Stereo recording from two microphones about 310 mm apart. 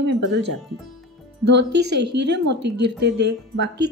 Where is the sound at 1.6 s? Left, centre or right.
Right.